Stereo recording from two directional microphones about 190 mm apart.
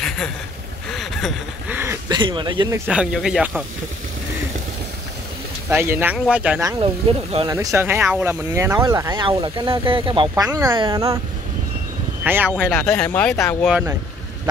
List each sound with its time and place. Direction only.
0.9 s a sound: centre (ahead or behind)
1.7 s a sound: 15° right (ahead or behind)
2.1 s speech: 25° right (ahead or behind)
2.9 s speech: 5° right (ahead or behind)
5.7 s speech: 10° right (ahead or behind)
12.3 s speech: 10° right (ahead or behind)
13.7 s speech: 10° right (ahead or behind)